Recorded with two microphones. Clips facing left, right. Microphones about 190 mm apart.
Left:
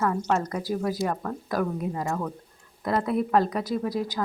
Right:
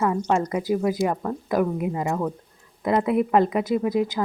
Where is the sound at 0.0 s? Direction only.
10° right (ahead or behind).